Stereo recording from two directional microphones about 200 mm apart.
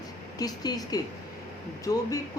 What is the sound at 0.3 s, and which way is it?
A woman's voice, 20° left (ahead or behind).